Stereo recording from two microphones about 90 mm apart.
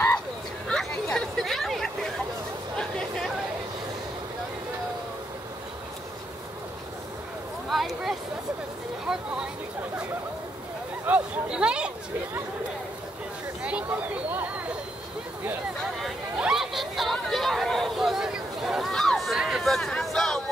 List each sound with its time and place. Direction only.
0.7 s hubbub: 10° left (ahead or behind)
7.7 s a sound: centre (ahead or behind)
11.1 s speech: 20° right (ahead or behind)
16.3 s chatter: 5° right (ahead or behind)